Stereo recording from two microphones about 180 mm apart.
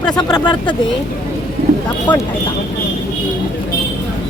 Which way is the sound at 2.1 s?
25° left (ahead or behind).